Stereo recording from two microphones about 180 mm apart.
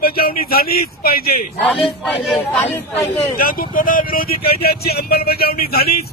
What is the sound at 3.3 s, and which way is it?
Speech, 55° left (ahead or behind).